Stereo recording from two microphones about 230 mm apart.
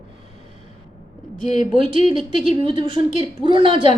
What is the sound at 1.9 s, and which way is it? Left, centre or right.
A woman's voice, right.